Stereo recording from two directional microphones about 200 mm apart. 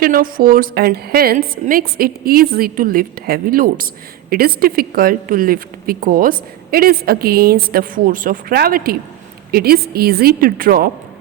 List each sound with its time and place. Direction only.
0.0 s a woman's voice: 45° right (ahead or behind)